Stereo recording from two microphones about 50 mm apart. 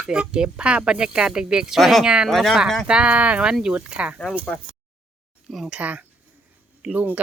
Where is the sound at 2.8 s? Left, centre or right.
Right.